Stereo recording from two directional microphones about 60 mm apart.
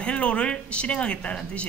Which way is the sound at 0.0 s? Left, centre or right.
Centre.